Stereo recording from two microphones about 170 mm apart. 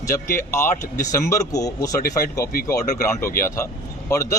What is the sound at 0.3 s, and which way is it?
Speech, 15° left (ahead or behind).